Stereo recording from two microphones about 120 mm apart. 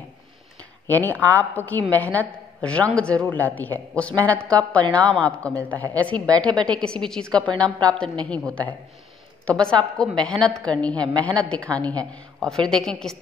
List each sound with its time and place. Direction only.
0.8 s a woman's voice: 15° left (ahead or behind)
9.5 s a woman's voice: 5° left (ahead or behind)